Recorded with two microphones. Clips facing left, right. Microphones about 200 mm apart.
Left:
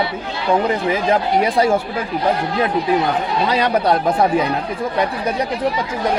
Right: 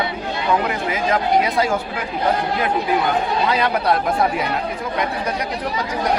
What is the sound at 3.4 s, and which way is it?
Speech, 30° left (ahead or behind).